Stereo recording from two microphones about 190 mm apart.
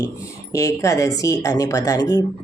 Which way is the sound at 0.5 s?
15° left (ahead or behind).